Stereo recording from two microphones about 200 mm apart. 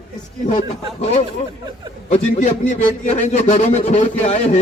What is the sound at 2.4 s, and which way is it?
A man's voice, 35° left (ahead or behind).